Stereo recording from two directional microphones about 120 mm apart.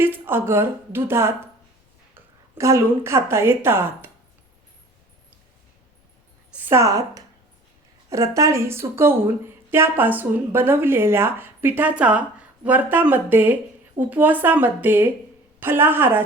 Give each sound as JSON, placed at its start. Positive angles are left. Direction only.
{"t": 0.0, "sound": "speech", "side_deg": -20}
{"t": 2.6, "sound": "speech", "side_deg": -25}
{"t": 6.6, "sound": "a woman's voice", "side_deg": -20}